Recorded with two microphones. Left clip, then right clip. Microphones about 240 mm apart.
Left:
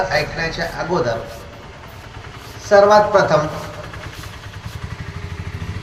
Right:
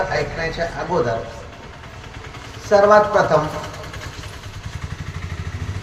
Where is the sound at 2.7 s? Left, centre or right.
Left.